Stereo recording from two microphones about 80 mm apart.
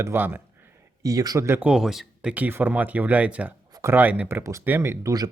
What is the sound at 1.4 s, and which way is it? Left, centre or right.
Speech, right.